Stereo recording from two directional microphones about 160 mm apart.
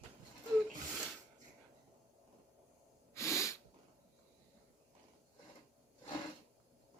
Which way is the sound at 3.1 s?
20° left (ahead or behind).